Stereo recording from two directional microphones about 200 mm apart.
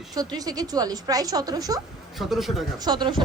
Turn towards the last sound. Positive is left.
turn(degrees=-20)  # may be behind; listen again after turning